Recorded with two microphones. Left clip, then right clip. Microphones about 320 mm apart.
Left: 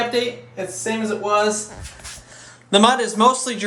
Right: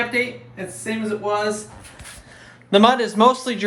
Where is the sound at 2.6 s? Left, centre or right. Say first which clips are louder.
Even; centre.